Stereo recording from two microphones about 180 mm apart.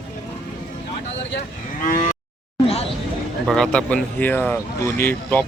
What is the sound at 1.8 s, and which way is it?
Moo, 50° left (ahead or behind).